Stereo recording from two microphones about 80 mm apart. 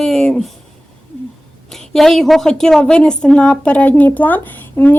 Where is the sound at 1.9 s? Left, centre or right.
Centre; by 5.0 s left.